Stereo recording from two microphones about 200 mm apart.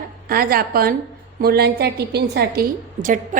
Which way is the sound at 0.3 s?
50° right (ahead or behind).